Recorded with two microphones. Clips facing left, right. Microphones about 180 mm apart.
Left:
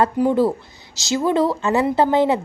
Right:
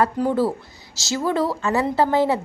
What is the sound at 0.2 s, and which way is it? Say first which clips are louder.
A woman's voice: left 3 dB; 20° left (ahead or behind).